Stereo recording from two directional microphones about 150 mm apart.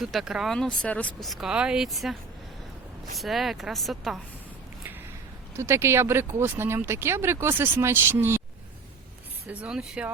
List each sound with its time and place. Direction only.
0.0 s speech: centre (ahead or behind)
3.2 s speech: centre (ahead or behind)
5.5 s speech: 15° right (ahead or behind)
9.5 s speech: 10° right (ahead or behind)